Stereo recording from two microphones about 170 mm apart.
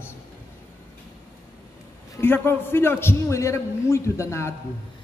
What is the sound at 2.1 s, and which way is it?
A man's voice, 10° left (ahead or behind).